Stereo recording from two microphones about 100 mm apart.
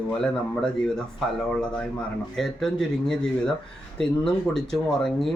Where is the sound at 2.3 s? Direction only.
Centre (ahead or behind).